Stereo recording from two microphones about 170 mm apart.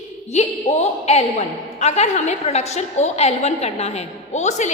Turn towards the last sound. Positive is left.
turn(degrees=45)  # may be behind; listen again after turning